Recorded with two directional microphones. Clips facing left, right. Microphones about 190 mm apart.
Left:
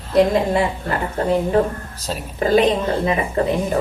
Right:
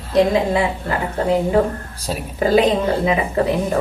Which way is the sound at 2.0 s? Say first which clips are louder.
Right 2 dB; 10° right (ahead or behind).